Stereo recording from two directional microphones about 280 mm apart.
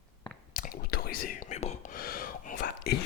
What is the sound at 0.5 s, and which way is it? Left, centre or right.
Whispering, left.